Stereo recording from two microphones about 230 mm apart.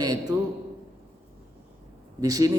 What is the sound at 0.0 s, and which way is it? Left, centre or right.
Speech, centre.